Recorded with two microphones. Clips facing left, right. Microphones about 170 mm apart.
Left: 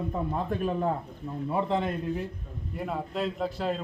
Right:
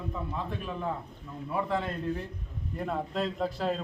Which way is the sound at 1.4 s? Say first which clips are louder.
Left 3 dB; 25° left (ahead or behind).